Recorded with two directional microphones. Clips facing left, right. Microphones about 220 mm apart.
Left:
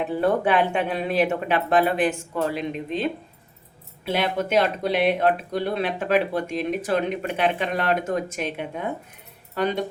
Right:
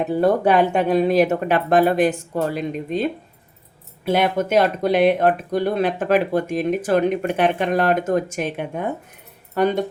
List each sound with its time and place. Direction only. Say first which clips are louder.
0.0 s speech: right 4 dB; 40° right (ahead or behind)